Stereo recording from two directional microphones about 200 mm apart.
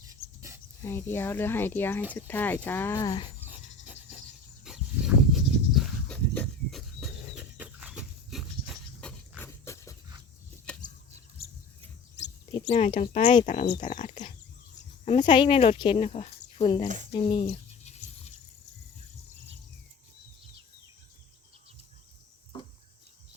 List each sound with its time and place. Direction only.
0.1 s dog: 15° right (ahead or behind)
0.8 s speech: 10° left (ahead or behind)
3.4 s a sound: 5° right (ahead or behind)
4.6 s dog: centre (ahead or behind); by 9.9 s 15° left (ahead or behind)
12.5 s speech: 25° left (ahead or behind)
15.0 s speech: 25° left (ahead or behind)
17.8 s a sound: 35° left (ahead or behind)